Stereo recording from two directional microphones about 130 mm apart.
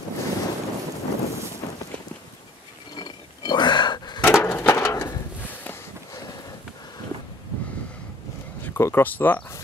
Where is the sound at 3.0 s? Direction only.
35° left (ahead or behind).